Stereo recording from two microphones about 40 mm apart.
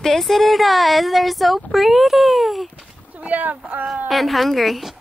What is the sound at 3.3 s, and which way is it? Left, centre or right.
Speech, right.